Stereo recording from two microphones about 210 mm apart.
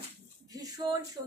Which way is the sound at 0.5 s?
15° right (ahead or behind).